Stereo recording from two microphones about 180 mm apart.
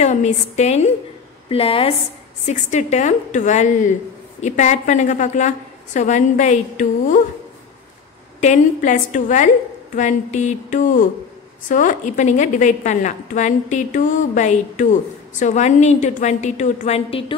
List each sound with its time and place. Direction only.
0.0 s a woman's voice: 40° left (ahead or behind)
8.4 s a woman's voice: 40° left (ahead or behind)